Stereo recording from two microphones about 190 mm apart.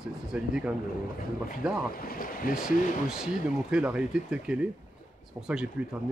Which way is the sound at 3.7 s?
5° right (ahead or behind).